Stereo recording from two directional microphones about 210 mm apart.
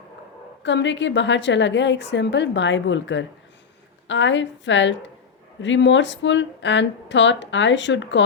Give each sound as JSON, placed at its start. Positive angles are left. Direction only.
{"t": 0.6, "sound": "a woman's voice", "side_deg": 60}